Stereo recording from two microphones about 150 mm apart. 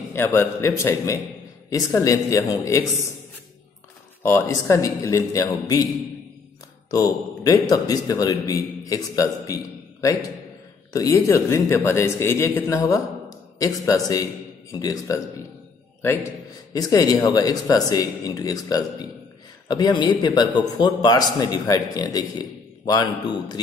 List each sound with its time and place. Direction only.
0.1 s a man's voice: 15° left (ahead or behind)
4.2 s a man's voice: 20° left (ahead or behind)
6.9 s a man's voice: 25° left (ahead or behind)
10.9 s speech: 20° left (ahead or behind)
16.7 s a man's voice: 25° left (ahead or behind)